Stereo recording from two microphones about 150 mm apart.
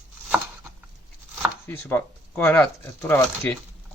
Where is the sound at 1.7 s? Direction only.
15° left (ahead or behind).